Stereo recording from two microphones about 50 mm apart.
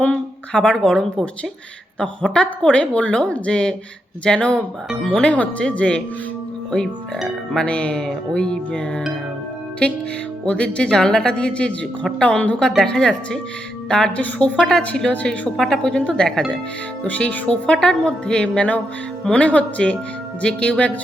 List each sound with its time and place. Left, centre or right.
0.0 s a sound: left
0.8 s speech: centre
7.5 s speech: left
10.4 s speech: left
12.5 s speech: centre
15.1 s speech: left
15.5 s speech: centre
15.8 s speech: centre
17.1 s speech: left
17.7 s speech: centre